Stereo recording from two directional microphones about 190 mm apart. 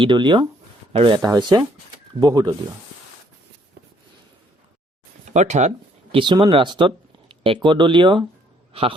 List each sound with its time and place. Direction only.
0.0 s speech: 25° right (ahead or behind)
5.3 s a man's voice: 40° right (ahead or behind)